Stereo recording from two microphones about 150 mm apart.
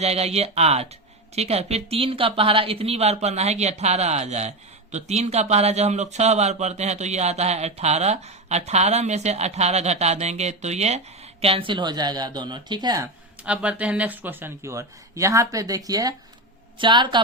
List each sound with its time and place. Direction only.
0.0 s a woman's voice: 45° right (ahead or behind); by 13.1 s 25° right (ahead or behind)
13.4 s a woman's voice: 10° right (ahead or behind); by 17.2 s 30° right (ahead or behind)